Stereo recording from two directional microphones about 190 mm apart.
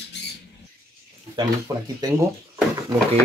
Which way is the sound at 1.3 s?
20° right (ahead or behind).